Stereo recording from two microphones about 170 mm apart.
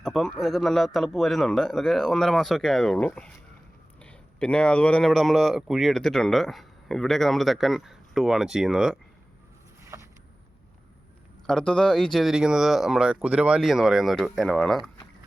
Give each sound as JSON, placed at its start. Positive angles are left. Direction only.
{"t": 0.0, "sound": "speech", "side_deg": 0}
{"t": 9.9, "sound": "a sound", "side_deg": -15}
{"t": 11.4, "sound": "speech", "side_deg": 5}